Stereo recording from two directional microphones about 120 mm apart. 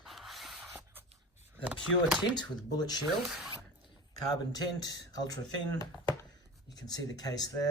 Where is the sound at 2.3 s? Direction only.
35° left (ahead or behind).